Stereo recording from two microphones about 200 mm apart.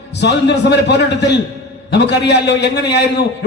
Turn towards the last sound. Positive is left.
turn(degrees=55)  # may be behind; listen again after turning